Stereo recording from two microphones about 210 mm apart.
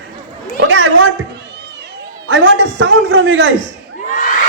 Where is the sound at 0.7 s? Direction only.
60° right (ahead or behind).